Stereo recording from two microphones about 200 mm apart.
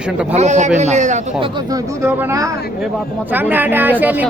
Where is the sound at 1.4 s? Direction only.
15° right (ahead or behind).